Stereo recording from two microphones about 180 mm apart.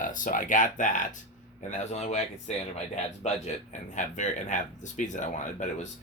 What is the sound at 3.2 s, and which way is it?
Speech, 40° left (ahead or behind).